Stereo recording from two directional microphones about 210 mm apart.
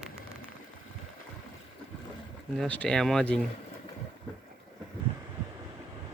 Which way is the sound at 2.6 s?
5° left (ahead or behind).